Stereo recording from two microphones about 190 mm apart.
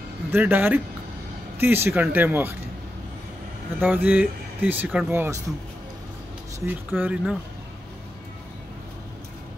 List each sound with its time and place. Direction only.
0.3 s speech: 10° right (ahead or behind)
3.8 s speech: 10° right (ahead or behind)
6.6 s speech: 10° right (ahead or behind)